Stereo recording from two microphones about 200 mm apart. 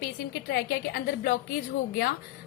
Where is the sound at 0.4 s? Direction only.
50° left (ahead or behind).